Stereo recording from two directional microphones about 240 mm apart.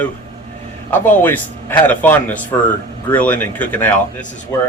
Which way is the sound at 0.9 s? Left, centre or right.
Centre.